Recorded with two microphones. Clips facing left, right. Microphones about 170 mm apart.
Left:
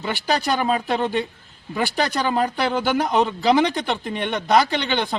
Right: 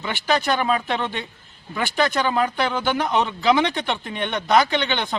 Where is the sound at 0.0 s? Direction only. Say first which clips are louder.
Even; 35° left (ahead or behind).